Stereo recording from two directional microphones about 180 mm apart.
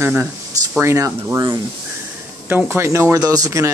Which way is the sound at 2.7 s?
15° right (ahead or behind).